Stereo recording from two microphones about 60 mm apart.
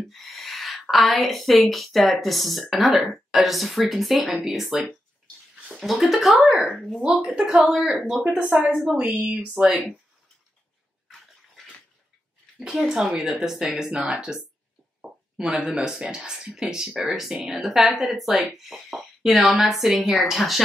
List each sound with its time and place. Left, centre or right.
0.1 s a woman's voice: centre
5.8 s a woman's voice: centre
8.2 s a woman's voice: right
12.8 s speech: centre
15.0 s a sound: centre
15.8 s a woman's voice: centre